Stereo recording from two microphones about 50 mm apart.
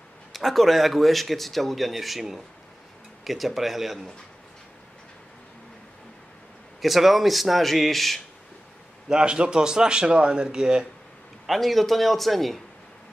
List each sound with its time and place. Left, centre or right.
0.3 s speech: centre
6.8 s speech: centre
9.1 s a man's voice: centre
11.4 s speech: centre